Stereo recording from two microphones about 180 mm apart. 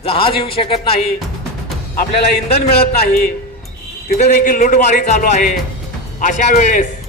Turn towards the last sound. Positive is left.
turn(degrees=40)  # may be behind; listen again after turning